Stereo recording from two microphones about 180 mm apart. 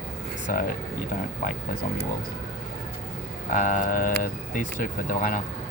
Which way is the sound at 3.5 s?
50° left (ahead or behind).